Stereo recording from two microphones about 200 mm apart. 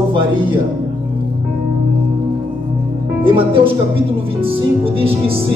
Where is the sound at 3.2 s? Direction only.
25° right (ahead or behind).